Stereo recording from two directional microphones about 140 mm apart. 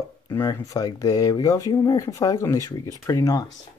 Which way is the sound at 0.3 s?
30° left (ahead or behind).